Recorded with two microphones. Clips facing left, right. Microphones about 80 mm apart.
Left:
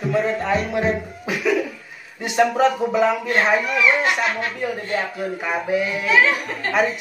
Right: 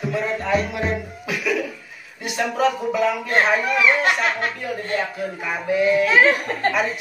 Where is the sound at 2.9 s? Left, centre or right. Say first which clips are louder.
Left 1 dB; left.